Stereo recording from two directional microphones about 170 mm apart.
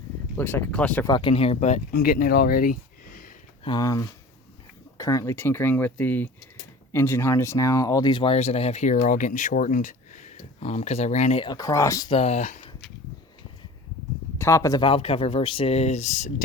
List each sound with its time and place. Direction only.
0.3 s speech: 10° left (ahead or behind)
1.0 s speech: 30° left (ahead or behind)
1.9 s speech: 60° left (ahead or behind)
3.6 s speech: 25° left (ahead or behind); by 11.4 s 40° left (ahead or behind)
11.4 s speech: 20° left (ahead or behind)
12.1 s speech: 40° left (ahead or behind)
14.3 s speech: 15° left (ahead or behind)
14.8 s speech: 30° left (ahead or behind)